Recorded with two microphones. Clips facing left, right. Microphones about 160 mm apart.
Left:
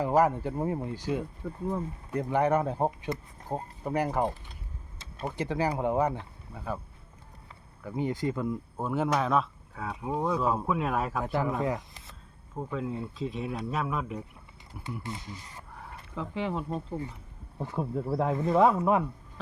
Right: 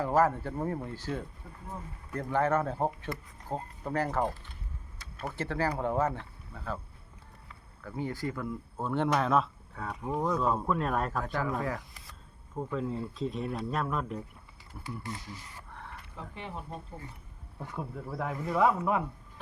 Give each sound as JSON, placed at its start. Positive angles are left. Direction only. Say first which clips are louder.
{"t": 0.0, "sound": "speech", "louder": "left 2 dB", "side_deg": 15}
{"t": 7.9, "sound": "speech", "louder": "left 5 dB", "side_deg": 20}
{"t": 8.9, "sound": "speech", "louder": "even", "side_deg": 5}
{"t": 11.3, "sound": "speech", "louder": "left 4 dB", "side_deg": 20}
{"t": 11.6, "sound": "a sound", "louder": "left 4 dB", "side_deg": 20}
{"t": 12.5, "sound": "speech", "louder": "even", "side_deg": 5}
{"t": 15.0, "sound": "speech", "louder": "left 2 dB", "side_deg": 20}
{"t": 16.1, "sound": "speech", "louder": "left 10 dB", "side_deg": 90}
{"t": 17.6, "sound": "speech", "louder": "left 7 dB", "side_deg": 25}